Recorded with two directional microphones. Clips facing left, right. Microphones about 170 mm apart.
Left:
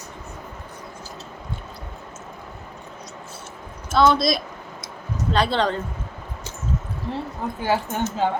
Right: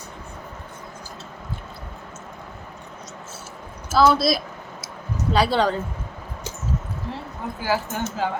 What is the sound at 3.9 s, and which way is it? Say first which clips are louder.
Speech: even; 5° right (ahead or behind).